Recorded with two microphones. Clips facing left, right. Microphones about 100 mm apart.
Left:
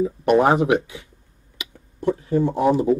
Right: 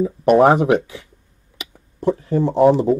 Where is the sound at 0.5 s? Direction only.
40° right (ahead or behind).